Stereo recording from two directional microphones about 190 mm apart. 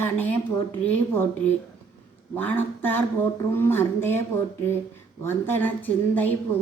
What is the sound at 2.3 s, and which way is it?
A woman's voice, 10° left (ahead or behind).